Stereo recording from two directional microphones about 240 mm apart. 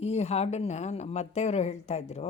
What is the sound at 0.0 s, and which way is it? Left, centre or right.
A woman's voice, left.